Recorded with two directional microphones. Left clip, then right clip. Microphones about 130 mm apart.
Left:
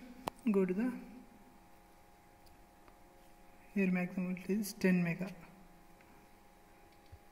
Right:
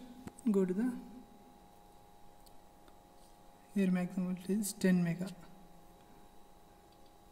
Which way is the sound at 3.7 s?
55° right (ahead or behind).